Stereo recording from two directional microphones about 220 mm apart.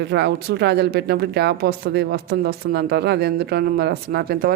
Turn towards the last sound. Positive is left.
turn(degrees=-45)  # may be behind; listen again after turning